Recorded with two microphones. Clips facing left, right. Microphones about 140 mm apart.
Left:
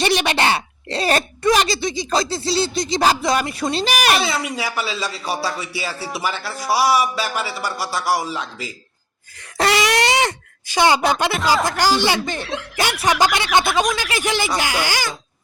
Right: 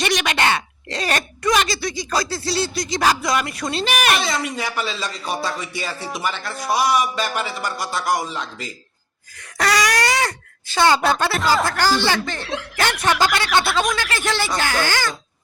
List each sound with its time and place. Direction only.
0.0 s speech: 30° left (ahead or behind)
4.2 s speech: 10° left (ahead or behind)
9.6 s speech: 25° left (ahead or behind)